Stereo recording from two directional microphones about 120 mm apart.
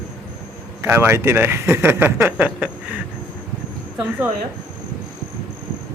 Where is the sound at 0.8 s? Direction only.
20° right (ahead or behind).